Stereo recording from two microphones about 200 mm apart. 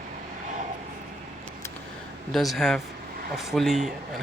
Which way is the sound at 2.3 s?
Centre (ahead or behind).